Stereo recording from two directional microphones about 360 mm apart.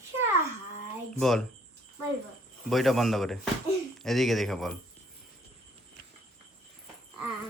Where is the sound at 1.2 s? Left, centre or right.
Centre.